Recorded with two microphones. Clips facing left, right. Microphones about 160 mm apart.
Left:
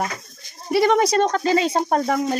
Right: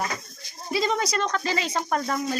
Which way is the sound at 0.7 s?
70° left (ahead or behind).